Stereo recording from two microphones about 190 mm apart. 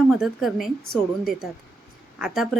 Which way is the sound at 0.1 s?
Centre (ahead or behind).